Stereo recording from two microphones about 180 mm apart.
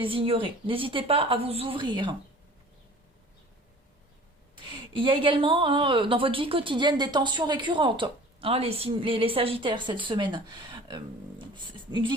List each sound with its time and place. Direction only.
0.0 s a woman's voice: 30° right (ahead or behind)
4.7 s a woman's voice: 30° right (ahead or behind)